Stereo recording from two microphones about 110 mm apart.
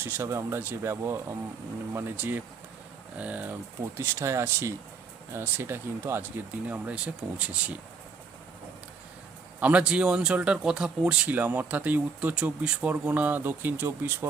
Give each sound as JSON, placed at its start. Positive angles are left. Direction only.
{"t": 0.0, "sound": "speech", "side_deg": -20}
{"t": 9.6, "sound": "speech", "side_deg": -10}